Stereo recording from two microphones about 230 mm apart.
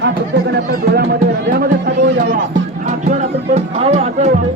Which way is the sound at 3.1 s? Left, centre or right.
Right.